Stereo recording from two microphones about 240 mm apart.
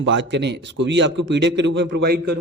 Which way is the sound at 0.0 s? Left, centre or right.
Right.